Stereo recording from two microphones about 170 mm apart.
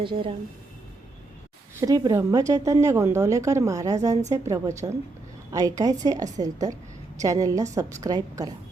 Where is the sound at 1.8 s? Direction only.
20° right (ahead or behind).